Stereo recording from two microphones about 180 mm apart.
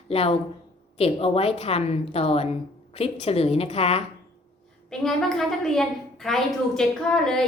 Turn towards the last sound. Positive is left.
turn(degrees=5)  # may be behind; listen again after turning